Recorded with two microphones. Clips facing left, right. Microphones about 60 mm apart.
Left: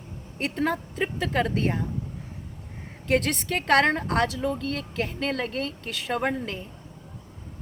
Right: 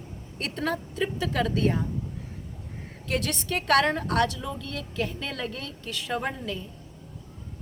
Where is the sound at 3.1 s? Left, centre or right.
Left.